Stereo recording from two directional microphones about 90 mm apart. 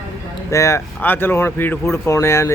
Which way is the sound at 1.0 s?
25° left (ahead or behind).